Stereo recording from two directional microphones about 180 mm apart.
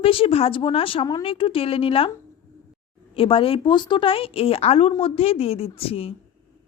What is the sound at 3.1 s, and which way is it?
Speech, 30° left (ahead or behind).